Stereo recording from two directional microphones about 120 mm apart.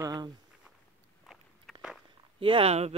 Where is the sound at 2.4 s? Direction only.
50° right (ahead or behind).